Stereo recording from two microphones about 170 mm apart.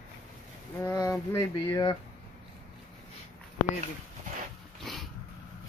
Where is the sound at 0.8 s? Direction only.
20° left (ahead or behind).